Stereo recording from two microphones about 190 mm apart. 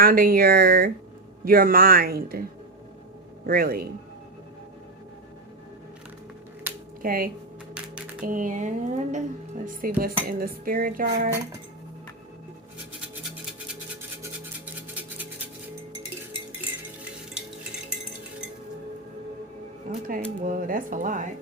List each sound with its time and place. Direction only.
0.0 s speech: 50° right (ahead or behind)
7.0 s speech: 50° right (ahead or behind)
19.9 s speech: 45° right (ahead or behind)